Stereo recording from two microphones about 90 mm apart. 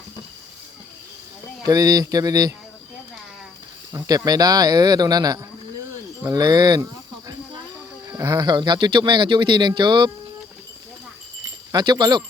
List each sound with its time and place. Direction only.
1.6 s speech: 45° right (ahead or behind)
3.9 s speech: 40° right (ahead or behind)
8.0 s music: 35° right (ahead or behind)
8.4 s speech: 55° right (ahead or behind)
11.7 s speech: 55° right (ahead or behind)